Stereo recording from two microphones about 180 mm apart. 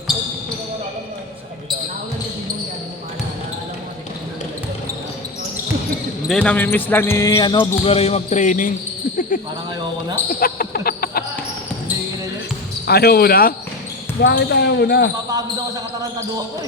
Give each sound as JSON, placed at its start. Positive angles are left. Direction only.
{"t": 6.2, "sound": "speech", "side_deg": 5}
{"t": 7.5, "sound": "speech", "side_deg": 30}
{"t": 10.4, "sound": "basketball bounce", "side_deg": 55}
{"t": 12.9, "sound": "speech", "side_deg": 60}
{"t": 14.2, "sound": "speech", "side_deg": 70}
{"t": 15.3, "sound": "speech", "side_deg": -20}